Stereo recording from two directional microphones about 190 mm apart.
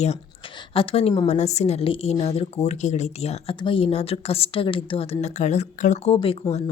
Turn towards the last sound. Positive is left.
turn(degrees=30)  # may be behind; listen again after turning